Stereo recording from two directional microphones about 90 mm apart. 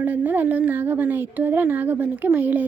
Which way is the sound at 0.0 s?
20° right (ahead or behind).